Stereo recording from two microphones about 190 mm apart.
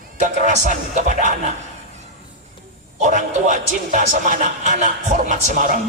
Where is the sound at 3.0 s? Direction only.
40° right (ahead or behind).